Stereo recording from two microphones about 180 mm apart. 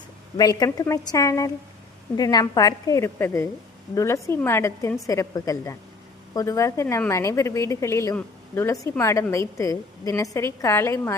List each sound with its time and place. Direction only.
0.3 s a woman's voice: 20° left (ahead or behind)